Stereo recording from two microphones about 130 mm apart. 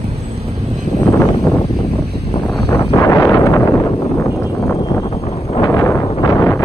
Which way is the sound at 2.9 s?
25° left (ahead or behind).